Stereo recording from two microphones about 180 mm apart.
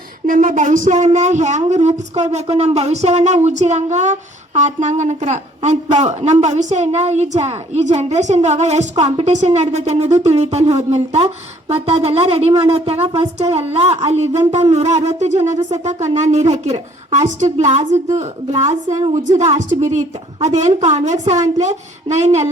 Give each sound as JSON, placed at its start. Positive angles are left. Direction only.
{"t": 0.3, "sound": "speech", "side_deg": -45}